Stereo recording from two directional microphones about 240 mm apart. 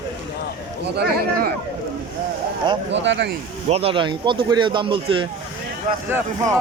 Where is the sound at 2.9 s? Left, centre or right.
Right.